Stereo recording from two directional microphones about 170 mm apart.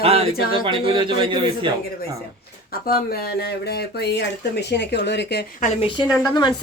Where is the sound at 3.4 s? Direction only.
70° left (ahead or behind).